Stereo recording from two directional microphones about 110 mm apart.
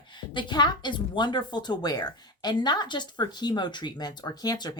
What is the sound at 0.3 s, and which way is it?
Speech, 45° left (ahead or behind).